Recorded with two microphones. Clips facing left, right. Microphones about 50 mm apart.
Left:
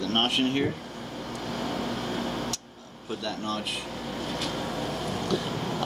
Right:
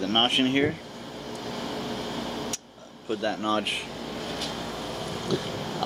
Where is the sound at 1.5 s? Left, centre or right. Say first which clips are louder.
Left 2 dB; centre.